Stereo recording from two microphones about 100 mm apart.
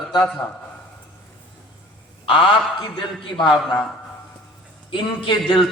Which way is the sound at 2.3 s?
60° left (ahead or behind).